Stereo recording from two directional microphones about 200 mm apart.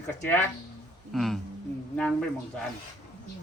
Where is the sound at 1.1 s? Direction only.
Centre (ahead or behind).